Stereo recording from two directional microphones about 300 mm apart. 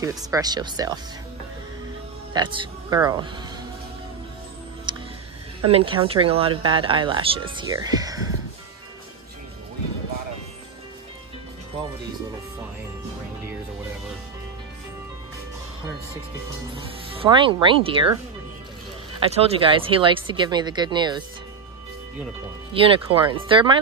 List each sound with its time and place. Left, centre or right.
0.0 s speech: centre
2.3 s speech: centre
4.9 s music: centre
5.7 s speech: centre
16.7 s speech: centre
22.7 s speech: centre